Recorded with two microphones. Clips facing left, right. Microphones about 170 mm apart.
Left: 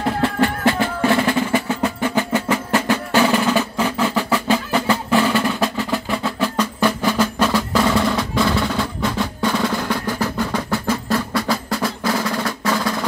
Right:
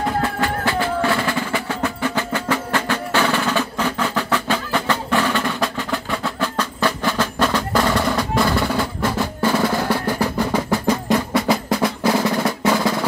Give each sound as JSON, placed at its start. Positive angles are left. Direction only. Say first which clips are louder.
{"t": 0.2, "sound": "percussion", "louder": "left 4 dB", "side_deg": 25}
{"t": 10.5, "sound": "drum roll", "louder": "right 2 dB", "side_deg": -15}